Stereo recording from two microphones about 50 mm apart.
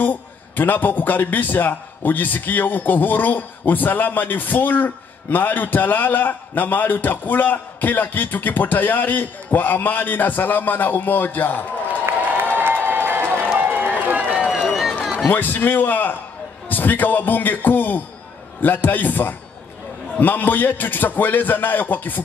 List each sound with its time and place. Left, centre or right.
0.0 s a man's voice: left
12.4 s crowd: right
13.6 s run: right
14.3 s run: centre
14.6 s run: centre
15.2 s a man's voice: left